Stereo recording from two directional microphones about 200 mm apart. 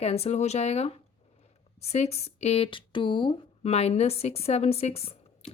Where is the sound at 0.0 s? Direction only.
30° left (ahead or behind).